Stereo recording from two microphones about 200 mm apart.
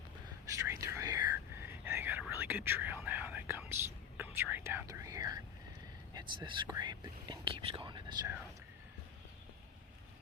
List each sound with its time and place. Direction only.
0.4 s whispering: 15° right (ahead or behind)
4.2 s speech: 10° right (ahead or behind)